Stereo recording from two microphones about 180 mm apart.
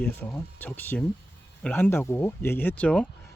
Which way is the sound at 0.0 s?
10° left (ahead or behind).